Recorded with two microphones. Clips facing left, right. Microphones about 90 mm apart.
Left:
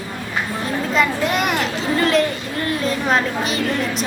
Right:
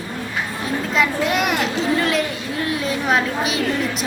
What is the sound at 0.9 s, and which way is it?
A child's voice, centre (ahead or behind).